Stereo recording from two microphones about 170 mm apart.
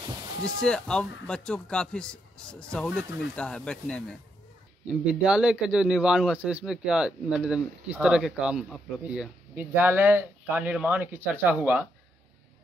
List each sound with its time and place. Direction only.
0.0 s a sound: 20° right (ahead or behind)
0.6 s speech: 5° left (ahead or behind)
4.8 s speech: 5° right (ahead or behind)